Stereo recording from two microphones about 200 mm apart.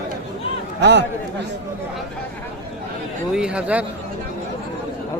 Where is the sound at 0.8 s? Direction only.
60° right (ahead or behind).